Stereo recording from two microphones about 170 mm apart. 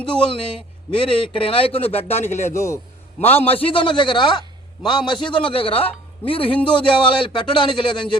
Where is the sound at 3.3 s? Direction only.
35° left (ahead or behind).